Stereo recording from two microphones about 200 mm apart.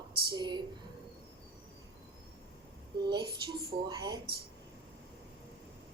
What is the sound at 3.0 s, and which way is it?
Speech, 20° right (ahead or behind).